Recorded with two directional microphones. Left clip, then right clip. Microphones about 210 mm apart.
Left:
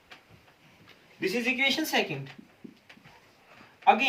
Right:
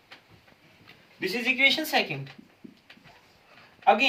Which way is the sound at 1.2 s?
25° right (ahead or behind).